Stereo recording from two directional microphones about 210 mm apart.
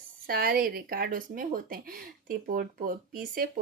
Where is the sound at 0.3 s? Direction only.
45° right (ahead or behind).